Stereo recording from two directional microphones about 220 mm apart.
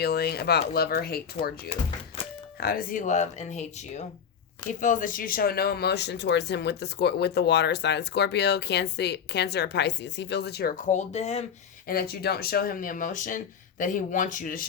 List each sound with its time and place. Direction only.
0.0 s speech: 45° left (ahead or behind); by 11.4 s 30° left (ahead or behind)
11.9 s speech: 45° left (ahead or behind)